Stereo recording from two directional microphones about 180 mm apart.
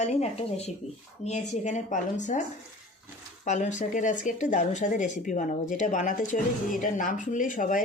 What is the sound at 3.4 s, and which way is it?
Speech, 40° left (ahead or behind).